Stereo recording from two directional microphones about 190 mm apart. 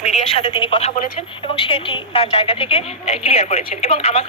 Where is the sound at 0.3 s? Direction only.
30° left (ahead or behind).